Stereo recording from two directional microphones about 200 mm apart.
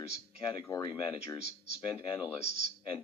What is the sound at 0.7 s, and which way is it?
Speech, 20° left (ahead or behind).